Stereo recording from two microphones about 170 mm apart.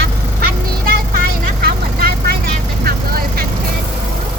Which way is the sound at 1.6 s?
65° right (ahead or behind).